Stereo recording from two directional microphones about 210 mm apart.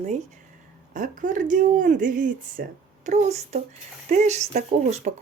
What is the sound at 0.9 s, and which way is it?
Speech, 40° right (ahead or behind).